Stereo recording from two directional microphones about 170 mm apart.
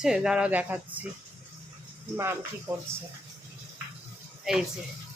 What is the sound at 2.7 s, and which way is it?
Speech, 20° right (ahead or behind).